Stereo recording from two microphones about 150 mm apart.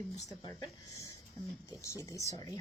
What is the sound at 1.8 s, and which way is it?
Speech, 20° left (ahead or behind).